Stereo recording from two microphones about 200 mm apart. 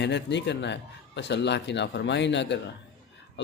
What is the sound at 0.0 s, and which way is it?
A man's voice, 60° left (ahead or behind).